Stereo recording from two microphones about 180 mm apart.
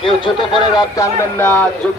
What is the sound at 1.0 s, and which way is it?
Speech, 10° left (ahead or behind).